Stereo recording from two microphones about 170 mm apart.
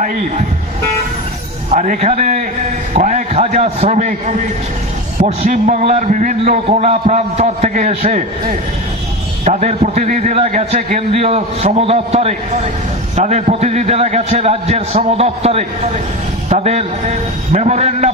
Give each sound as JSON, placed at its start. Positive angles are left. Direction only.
{"t": 1.7, "sound": "a man's voice", "side_deg": -45}